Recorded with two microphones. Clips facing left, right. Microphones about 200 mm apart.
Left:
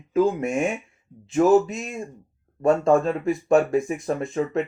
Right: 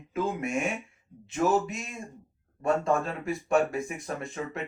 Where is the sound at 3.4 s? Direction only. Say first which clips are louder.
Left 6 dB; 40° left (ahead or behind).